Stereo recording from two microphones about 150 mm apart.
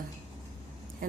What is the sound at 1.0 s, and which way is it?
Speech, 70° right (ahead or behind).